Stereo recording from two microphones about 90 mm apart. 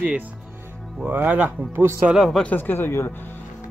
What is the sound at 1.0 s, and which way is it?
Speech, 20° right (ahead or behind).